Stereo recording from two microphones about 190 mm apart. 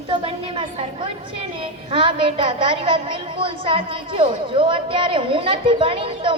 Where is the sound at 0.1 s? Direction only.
30° right (ahead or behind).